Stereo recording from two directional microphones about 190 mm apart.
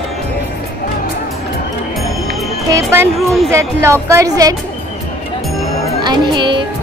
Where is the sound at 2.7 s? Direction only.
10° right (ahead or behind).